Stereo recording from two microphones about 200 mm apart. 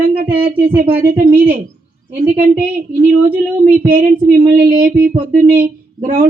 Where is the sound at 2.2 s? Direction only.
45° right (ahead or behind).